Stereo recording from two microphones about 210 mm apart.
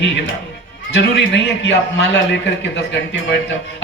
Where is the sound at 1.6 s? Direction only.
60° left (ahead or behind).